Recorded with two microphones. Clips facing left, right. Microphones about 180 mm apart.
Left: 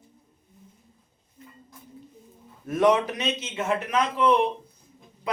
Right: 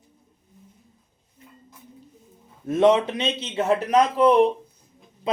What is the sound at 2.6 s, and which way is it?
A man's voice, 25° right (ahead or behind).